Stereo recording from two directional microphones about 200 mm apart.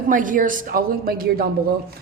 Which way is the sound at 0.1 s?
40° right (ahead or behind).